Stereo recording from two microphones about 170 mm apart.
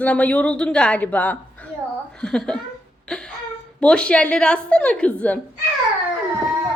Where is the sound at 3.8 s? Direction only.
5° left (ahead or behind).